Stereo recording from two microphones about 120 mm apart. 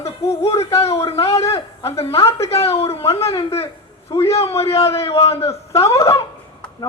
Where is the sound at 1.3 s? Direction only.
25° left (ahead or behind).